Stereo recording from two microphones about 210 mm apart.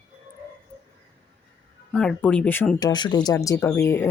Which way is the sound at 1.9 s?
5° left (ahead or behind).